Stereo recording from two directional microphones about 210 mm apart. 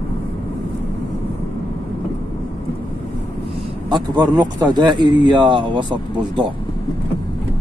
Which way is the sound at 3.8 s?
20° right (ahead or behind).